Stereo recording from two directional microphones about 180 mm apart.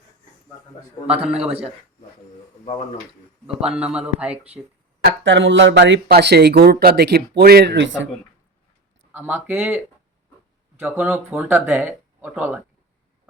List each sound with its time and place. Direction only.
1.3 s a man's voice: 5° right (ahead or behind)
3.4 s speech: 5° right (ahead or behind)
5.2 s speech: 90° right; by 7.9 s 75° right (ahead or behind)
9.1 s speech: 10° right (ahead or behind)